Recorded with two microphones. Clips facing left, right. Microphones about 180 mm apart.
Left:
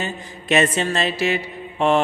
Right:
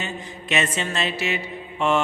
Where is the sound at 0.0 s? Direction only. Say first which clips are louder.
Left 3 dB; 40° left (ahead or behind).